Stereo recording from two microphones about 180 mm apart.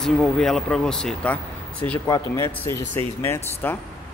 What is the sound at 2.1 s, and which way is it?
A man's voice, 15° left (ahead or behind).